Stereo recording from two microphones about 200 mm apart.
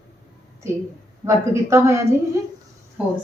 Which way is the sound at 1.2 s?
15° right (ahead or behind).